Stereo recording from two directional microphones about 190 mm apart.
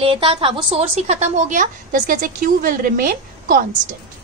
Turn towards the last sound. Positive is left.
turn(degrees=-50)  # may be behind; listen again after turning